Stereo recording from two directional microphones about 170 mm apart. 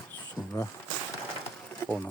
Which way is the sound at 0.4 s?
15° left (ahead or behind).